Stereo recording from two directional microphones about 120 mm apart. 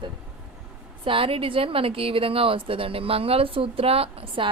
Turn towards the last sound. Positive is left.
turn(degrees=-50)  # may be behind; listen again after turning